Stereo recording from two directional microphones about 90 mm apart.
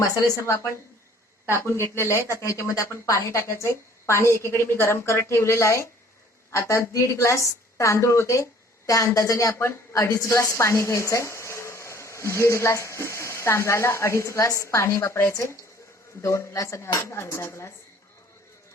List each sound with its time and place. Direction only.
0.0 s a woman's voice: 35° left (ahead or behind)